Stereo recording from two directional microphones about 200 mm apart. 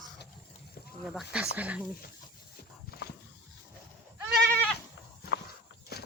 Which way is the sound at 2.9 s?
50° left (ahead or behind).